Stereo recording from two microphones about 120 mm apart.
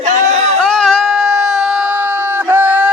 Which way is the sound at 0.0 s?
80° right.